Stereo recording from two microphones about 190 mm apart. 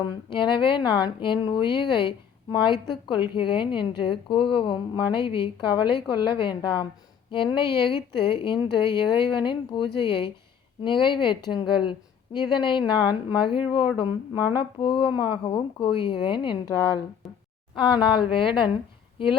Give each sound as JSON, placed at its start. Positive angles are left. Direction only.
{"t": 0.0, "sound": "a woman's voice", "side_deg": 25}
{"t": 17.2, "sound": "speech", "side_deg": 0}
{"t": 17.7, "sound": "a woman's voice", "side_deg": 25}